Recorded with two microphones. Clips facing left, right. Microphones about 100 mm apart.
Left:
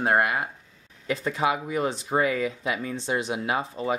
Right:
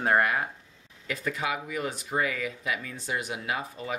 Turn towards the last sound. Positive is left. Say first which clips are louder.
# left 6 dB
turn(degrees=30)  # may be behind; listen again after turning